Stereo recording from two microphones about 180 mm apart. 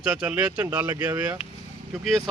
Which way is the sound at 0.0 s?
5° right (ahead or behind).